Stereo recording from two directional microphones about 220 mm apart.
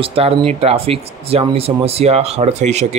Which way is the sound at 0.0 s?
25° right (ahead or behind).